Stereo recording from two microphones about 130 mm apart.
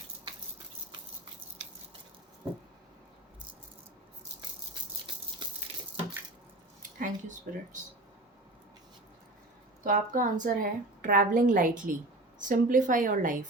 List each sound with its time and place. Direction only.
7.0 s speech: 80° right
9.8 s a woman's voice: 90° right